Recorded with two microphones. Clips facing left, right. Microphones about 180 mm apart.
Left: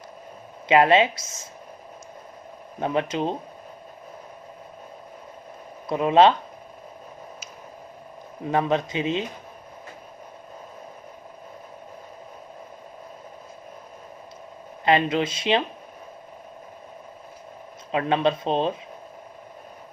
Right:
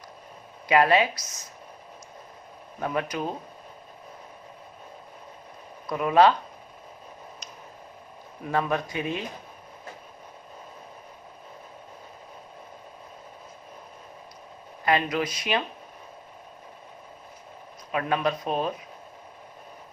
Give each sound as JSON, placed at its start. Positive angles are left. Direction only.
{"t": 0.7, "sound": "speech", "side_deg": 25}
{"t": 2.8, "sound": "speech", "side_deg": 25}
{"t": 5.9, "sound": "speech", "side_deg": 25}
{"t": 8.4, "sound": "speech", "side_deg": 20}
{"t": 14.8, "sound": "speech", "side_deg": 25}
{"t": 17.9, "sound": "speech", "side_deg": 25}